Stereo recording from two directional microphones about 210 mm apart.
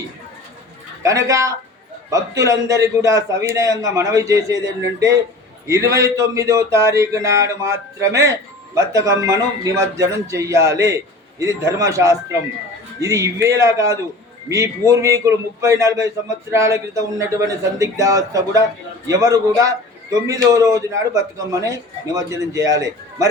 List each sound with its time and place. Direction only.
1.0 s speech: 15° right (ahead or behind)